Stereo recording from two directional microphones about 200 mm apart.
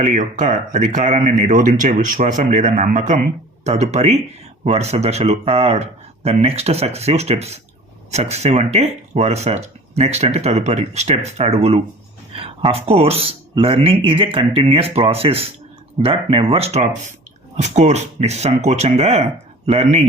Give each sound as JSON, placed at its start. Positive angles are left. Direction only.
{"t": 0.0, "sound": "speech", "side_deg": -40}